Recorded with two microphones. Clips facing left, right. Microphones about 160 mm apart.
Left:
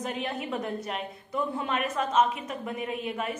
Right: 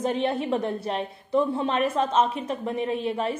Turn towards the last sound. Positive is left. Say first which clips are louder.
# right 6 dB
turn(degrees=-30)  # may be behind; listen again after turning